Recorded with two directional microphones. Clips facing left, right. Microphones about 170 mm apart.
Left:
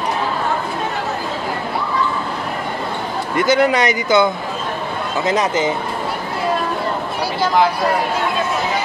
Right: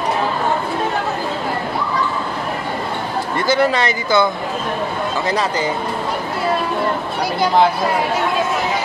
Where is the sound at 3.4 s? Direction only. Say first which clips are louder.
Left 2 dB; 20° left (ahead or behind).